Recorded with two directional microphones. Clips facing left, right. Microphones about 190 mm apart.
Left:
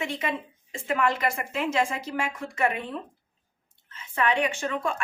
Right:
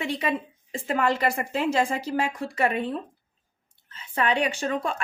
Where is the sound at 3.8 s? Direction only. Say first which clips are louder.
Right 1 dB; 35° right (ahead or behind).